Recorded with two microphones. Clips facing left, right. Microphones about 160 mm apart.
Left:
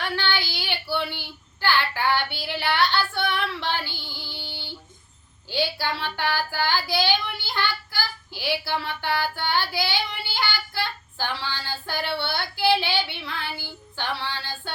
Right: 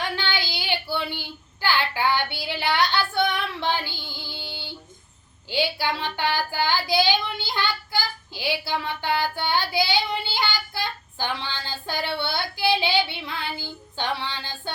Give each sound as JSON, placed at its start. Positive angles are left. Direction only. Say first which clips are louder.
{"t": 0.0, "sound": "child singing", "louder": "left 1 dB", "side_deg": -15}